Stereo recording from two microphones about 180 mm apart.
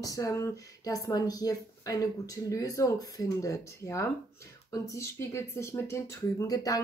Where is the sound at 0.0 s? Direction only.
20° left (ahead or behind).